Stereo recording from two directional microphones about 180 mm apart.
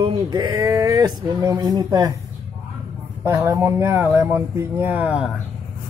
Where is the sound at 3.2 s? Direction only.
15° right (ahead or behind).